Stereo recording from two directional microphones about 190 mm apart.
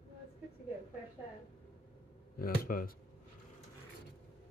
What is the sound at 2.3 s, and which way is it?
Speech, 50° left (ahead or behind).